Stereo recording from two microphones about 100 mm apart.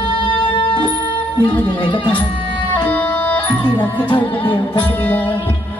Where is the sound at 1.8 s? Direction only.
55° left (ahead or behind).